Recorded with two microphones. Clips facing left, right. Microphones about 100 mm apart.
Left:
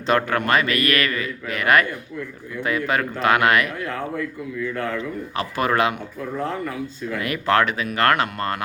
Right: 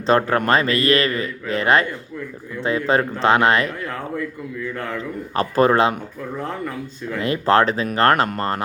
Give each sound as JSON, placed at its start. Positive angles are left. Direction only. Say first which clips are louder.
{"t": 0.0, "sound": "a man's voice", "louder": "right 3 dB", "side_deg": -30}
{"t": 5.3, "sound": "a man's voice", "louder": "right 7 dB", "side_deg": -35}
{"t": 7.2, "sound": "a man's voice", "louder": "right 3 dB", "side_deg": -30}